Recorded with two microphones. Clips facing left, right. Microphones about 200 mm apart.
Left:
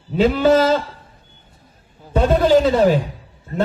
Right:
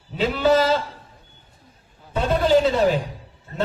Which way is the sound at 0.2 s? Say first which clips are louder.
Left 4 dB; 45° left (ahead or behind).